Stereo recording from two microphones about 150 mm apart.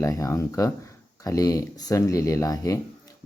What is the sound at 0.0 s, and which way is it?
Speech, 20° left (ahead or behind).